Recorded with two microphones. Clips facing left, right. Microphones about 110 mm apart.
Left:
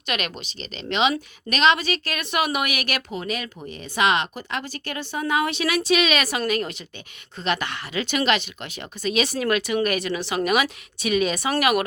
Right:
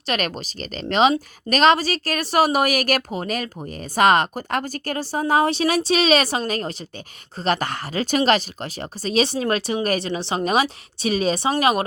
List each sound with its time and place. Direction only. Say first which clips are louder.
0.0 s a woman's voice: right 4 dB; 40° right (ahead or behind)